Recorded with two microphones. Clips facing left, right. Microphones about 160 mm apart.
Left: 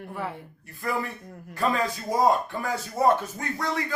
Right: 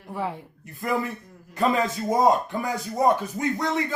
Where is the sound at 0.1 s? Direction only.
20° right (ahead or behind).